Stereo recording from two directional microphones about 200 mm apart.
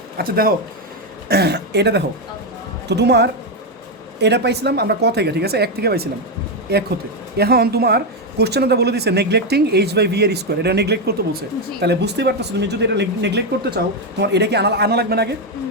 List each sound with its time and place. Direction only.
0.2 s speech: 45° right (ahead or behind)